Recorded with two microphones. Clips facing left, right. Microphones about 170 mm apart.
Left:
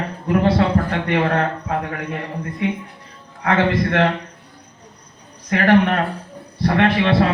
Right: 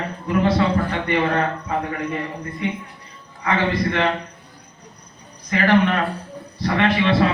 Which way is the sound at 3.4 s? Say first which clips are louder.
Left 3 dB; 65° left (ahead or behind).